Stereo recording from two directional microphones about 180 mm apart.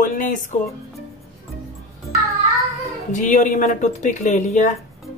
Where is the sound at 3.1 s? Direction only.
45° left (ahead or behind).